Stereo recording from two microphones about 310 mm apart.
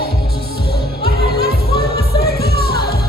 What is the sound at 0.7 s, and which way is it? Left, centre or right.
Music, left.